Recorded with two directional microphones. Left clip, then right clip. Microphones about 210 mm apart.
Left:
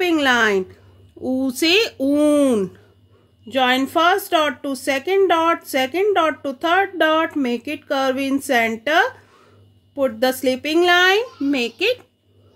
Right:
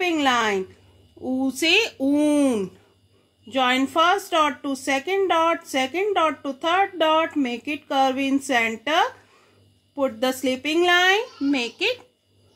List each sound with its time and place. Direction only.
0.0 s speech: 50° left (ahead or behind)